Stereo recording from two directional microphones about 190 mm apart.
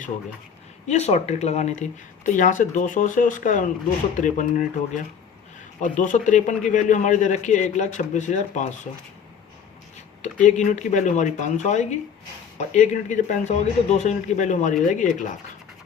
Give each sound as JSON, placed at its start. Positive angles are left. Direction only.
{"t": 0.9, "sound": "speech", "side_deg": 35}
{"t": 10.4, "sound": "speech", "side_deg": 40}